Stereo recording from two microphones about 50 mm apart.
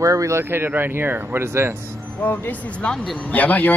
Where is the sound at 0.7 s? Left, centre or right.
Right.